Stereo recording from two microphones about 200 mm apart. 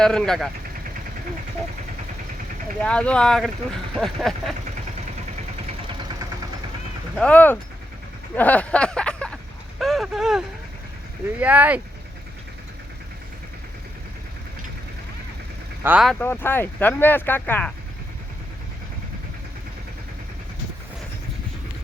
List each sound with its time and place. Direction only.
0.0 s speech: 5° left (ahead or behind)
2.8 s speech: 5° left (ahead or behind)
5.9 s vehicle: 25° right (ahead or behind)
7.2 s speech: 5° left (ahead or behind)
15.8 s speech: 10° right (ahead or behind)
16.0 s speech: 10° left (ahead or behind)